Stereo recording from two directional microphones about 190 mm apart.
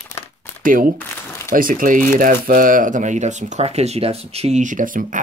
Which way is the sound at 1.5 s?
45° right (ahead or behind).